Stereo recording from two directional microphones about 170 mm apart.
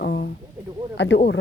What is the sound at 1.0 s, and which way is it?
Speech, 90° left.